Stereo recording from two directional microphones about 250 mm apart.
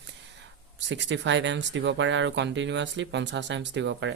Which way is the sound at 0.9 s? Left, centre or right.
Right.